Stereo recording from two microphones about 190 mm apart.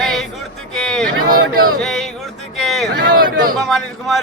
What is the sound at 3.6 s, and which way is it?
Speech, centre (ahead or behind).